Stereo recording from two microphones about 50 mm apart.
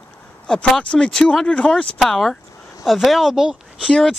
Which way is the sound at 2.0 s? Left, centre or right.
Centre.